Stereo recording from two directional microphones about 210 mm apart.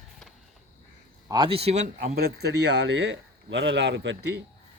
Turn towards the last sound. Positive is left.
turn(degrees=-55)  # may be behind; listen again after turning